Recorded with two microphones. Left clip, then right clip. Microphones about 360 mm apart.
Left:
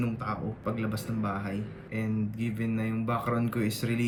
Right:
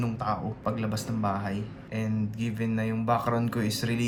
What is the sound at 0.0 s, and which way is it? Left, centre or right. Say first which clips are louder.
Speech: right 3 dB; centre.